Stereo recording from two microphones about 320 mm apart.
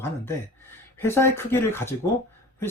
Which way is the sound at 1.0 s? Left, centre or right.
Centre.